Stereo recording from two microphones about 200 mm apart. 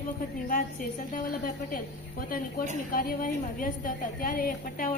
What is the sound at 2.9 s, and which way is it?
A woman's voice, 45° left (ahead or behind).